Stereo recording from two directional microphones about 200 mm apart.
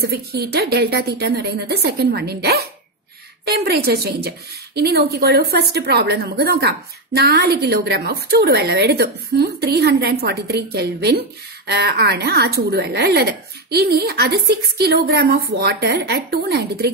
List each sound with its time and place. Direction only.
0.0 s a woman's voice: 50° right (ahead or behind)